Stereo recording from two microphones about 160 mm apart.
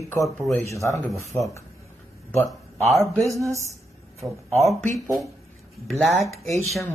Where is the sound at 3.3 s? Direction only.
20° right (ahead or behind).